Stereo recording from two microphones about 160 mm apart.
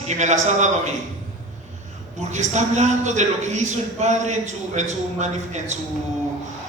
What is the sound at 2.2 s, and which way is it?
A man's voice, 50° right (ahead or behind).